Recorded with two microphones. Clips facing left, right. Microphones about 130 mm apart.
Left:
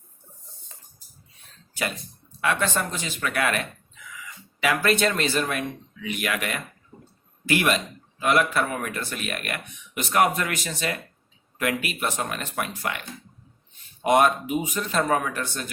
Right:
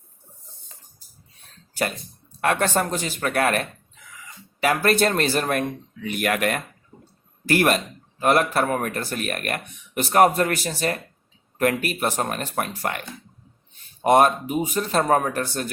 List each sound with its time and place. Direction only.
2.4 s speech: 45° right (ahead or behind)
14.0 s speech: 35° right (ahead or behind)